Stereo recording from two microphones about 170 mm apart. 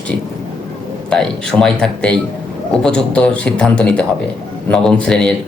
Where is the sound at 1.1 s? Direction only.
Centre (ahead or behind).